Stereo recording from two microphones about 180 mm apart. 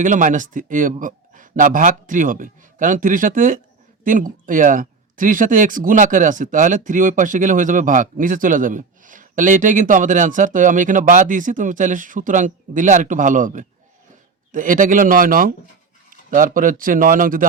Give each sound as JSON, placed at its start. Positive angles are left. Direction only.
{"t": 0.0, "sound": "speech", "side_deg": -45}